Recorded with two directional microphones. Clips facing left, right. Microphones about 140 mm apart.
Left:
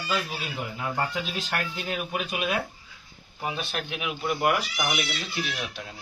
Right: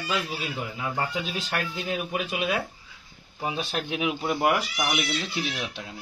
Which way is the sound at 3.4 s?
30° right (ahead or behind).